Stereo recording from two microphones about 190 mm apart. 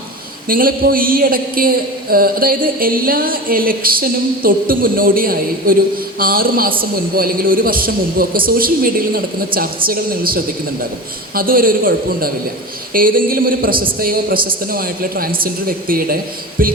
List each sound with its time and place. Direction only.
0.4 s a man's voice: 50° right (ahead or behind)